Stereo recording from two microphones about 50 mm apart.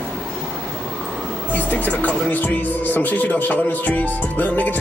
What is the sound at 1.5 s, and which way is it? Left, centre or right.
Speech, left.